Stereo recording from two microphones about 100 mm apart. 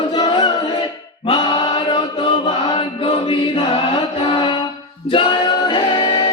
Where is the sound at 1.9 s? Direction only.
50° left (ahead or behind).